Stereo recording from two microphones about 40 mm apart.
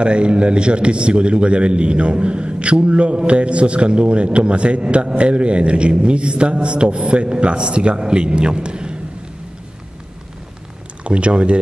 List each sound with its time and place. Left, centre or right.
0.0 s a man's voice: right
11.1 s a man's voice: right